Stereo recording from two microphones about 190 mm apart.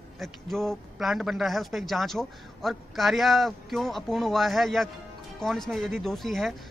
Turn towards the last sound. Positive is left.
turn(degrees=0)  # may be behind; listen again after turning